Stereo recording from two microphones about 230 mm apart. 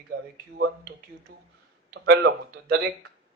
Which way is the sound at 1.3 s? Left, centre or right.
Right.